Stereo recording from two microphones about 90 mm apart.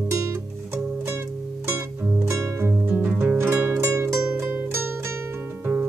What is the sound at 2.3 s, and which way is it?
Music, 30° right (ahead or behind).